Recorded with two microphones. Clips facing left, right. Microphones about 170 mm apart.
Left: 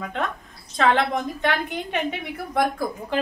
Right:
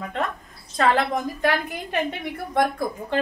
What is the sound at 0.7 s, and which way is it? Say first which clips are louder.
A woman's voice: even; centre (ahead or behind).